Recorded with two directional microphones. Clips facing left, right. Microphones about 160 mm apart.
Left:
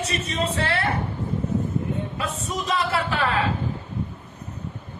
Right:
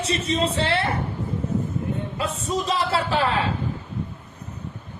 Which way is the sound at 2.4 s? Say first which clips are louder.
Right 2 dB; 30° right (ahead or behind).